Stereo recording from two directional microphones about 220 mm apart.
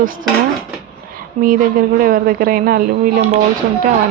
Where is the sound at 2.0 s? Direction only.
40° right (ahead or behind).